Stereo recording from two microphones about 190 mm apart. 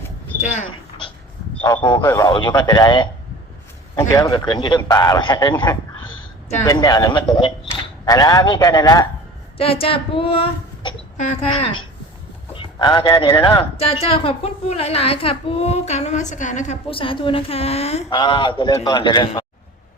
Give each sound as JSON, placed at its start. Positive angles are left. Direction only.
{"t": 0.4, "sound": "a sound", "side_deg": 40}
{"t": 1.6, "sound": "speech", "side_deg": 25}
{"t": 4.1, "sound": "speech", "side_deg": 20}
{"t": 9.6, "sound": "speech", "side_deg": 30}